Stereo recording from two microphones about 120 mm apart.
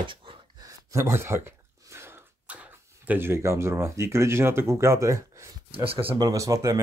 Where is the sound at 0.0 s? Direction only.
45° right (ahead or behind).